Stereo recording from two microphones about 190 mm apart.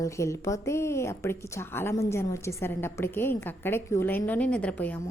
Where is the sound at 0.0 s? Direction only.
15° left (ahead or behind).